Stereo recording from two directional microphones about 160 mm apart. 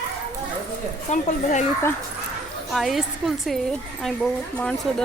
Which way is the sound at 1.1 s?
50° left (ahead or behind).